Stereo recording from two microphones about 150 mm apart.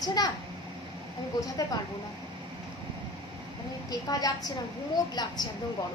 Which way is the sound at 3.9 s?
25° left (ahead or behind).